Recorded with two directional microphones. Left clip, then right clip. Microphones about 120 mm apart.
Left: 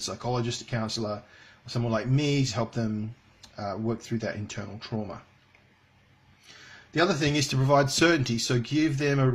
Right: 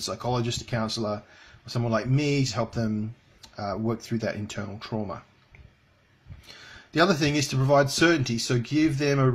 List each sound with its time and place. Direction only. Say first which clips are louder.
0.0 s speech: right 2 dB; 35° right (ahead or behind)
4.1 s speech: right 2 dB; 40° right (ahead or behind)
6.4 s a sound: right 3 dB; 45° right (ahead or behind)
7.2 s speech: right 1 dB; 15° right (ahead or behind)